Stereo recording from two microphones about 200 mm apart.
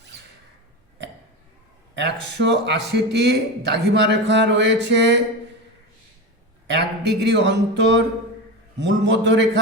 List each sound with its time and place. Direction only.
2.0 s a man's voice: 60° right (ahead or behind)
6.7 s a man's voice: 60° right (ahead or behind)